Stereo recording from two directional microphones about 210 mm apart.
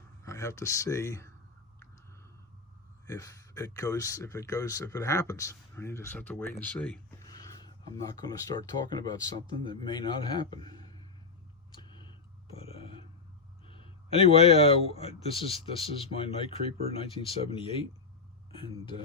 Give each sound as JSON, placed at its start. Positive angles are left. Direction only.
{"t": 0.2, "sound": "speech", "side_deg": 15}
{"t": 3.1, "sound": "speech", "side_deg": 15}
{"t": 7.3, "sound": "speech", "side_deg": 20}
{"t": 11.7, "sound": "a sound", "side_deg": 20}
{"t": 13.7, "sound": "speech", "side_deg": 25}